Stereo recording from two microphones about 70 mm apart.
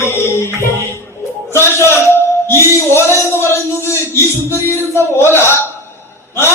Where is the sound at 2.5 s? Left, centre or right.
Left.